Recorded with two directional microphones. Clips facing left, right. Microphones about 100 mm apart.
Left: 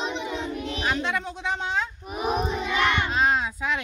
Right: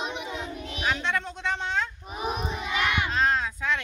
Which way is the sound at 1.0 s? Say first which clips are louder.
Left 1 dB; 5° left (ahead or behind).